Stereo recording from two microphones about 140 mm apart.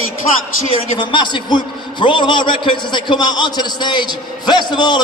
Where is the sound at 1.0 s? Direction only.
35° left (ahead or behind).